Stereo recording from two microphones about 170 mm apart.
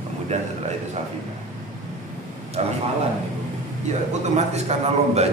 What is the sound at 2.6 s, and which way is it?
Speech, 40° right (ahead or behind).